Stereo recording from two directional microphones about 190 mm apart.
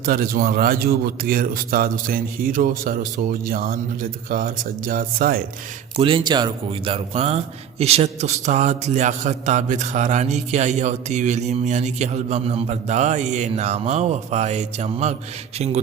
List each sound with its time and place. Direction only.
0.0 s a man's voice: 50° right (ahead or behind)
6.0 s a man's voice: 25° right (ahead or behind)